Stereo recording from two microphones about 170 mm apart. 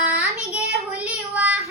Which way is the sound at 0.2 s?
5° right (ahead or behind).